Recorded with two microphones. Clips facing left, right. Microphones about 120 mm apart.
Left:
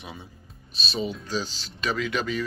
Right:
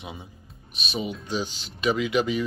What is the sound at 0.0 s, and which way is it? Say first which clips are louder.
Speech: right 2 dB; 20° right (ahead or behind).